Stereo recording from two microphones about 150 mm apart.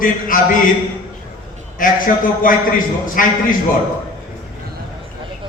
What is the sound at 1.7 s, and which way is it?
A man's voice, 65° left (ahead or behind).